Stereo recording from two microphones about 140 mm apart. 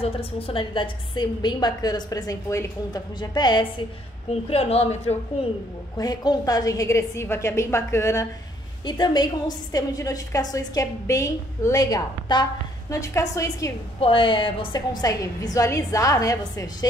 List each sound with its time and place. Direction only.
0.0 s a woman's voice: 45° left (ahead or behind)
4.5 s a woman's voice: 45° left (ahead or behind)
5.9 s a woman's voice: 30° left (ahead or behind)
8.8 s a woman's voice: 35° left (ahead or behind)
13.9 s a woman's voice: 40° left (ahead or behind); by 16.6 s 25° left (ahead or behind)